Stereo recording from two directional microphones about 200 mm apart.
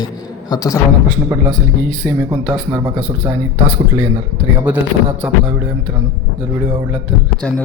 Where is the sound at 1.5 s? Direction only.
5° left (ahead or behind).